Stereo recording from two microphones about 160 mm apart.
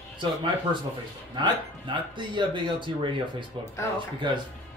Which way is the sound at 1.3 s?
30° right (ahead or behind).